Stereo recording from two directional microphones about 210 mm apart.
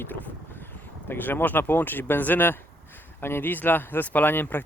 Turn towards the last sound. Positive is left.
turn(degrees=10)  # may be behind; listen again after turning